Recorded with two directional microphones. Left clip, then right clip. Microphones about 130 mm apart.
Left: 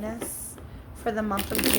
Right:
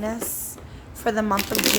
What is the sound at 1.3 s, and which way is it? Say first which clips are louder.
Speech: right 5 dB; 15° right (ahead or behind).